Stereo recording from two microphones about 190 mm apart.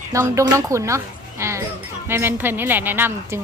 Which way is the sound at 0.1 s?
15° right (ahead or behind).